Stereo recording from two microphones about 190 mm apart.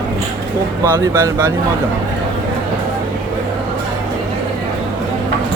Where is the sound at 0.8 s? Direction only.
20° right (ahead or behind).